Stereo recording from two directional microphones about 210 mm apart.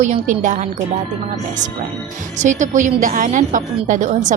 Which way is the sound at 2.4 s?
35° right (ahead or behind).